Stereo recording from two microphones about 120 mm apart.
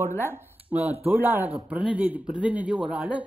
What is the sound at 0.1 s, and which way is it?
Speech, 15° left (ahead or behind).